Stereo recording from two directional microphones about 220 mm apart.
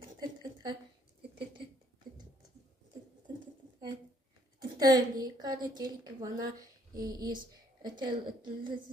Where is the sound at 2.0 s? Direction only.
40° right (ahead or behind).